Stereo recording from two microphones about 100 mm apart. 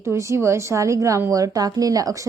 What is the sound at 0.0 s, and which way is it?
A woman's voice, 30° right (ahead or behind).